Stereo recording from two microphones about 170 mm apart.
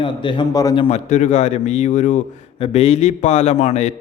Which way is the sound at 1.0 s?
45° left (ahead or behind).